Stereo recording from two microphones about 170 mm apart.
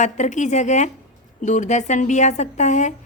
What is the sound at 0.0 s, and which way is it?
A woman's voice, 45° left (ahead or behind).